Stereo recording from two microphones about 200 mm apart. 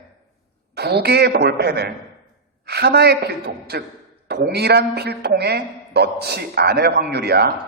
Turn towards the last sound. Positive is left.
turn(degrees=-55)  # may be behind; listen again after turning